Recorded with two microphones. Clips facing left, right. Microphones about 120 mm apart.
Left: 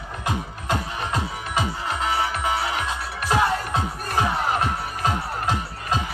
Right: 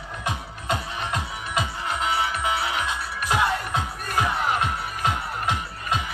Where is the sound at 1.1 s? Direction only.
30° left (ahead or behind).